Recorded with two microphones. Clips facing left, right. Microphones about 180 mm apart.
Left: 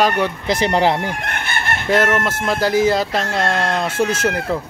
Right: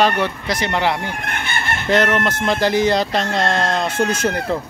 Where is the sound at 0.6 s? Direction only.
30° left (ahead or behind).